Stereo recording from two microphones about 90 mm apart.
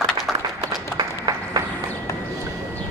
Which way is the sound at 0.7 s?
45° right (ahead or behind).